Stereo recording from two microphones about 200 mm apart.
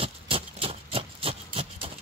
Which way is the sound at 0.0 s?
25° right (ahead or behind).